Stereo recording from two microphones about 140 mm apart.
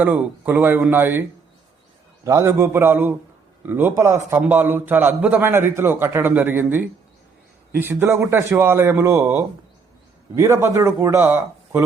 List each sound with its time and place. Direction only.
0.0 s a man's voice: 10° right (ahead or behind)
2.2 s a man's voice: 20° right (ahead or behind)